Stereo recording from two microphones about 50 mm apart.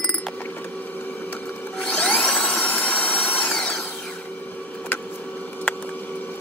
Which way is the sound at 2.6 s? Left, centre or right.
Left.